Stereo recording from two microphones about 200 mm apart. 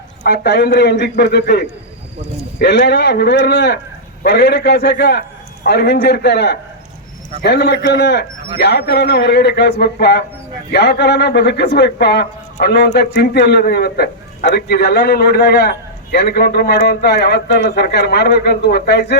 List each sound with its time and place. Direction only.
0.2 s a man's voice: 55° left (ahead or behind)